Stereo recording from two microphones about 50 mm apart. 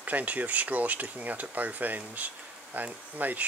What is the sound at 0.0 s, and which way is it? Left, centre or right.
Speech, right.